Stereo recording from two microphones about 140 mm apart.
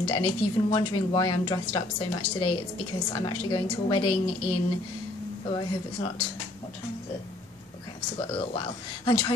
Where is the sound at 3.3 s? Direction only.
35° left (ahead or behind).